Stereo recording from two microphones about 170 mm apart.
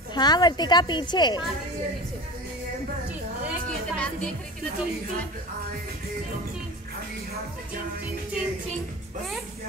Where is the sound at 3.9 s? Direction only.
5° left (ahead or behind).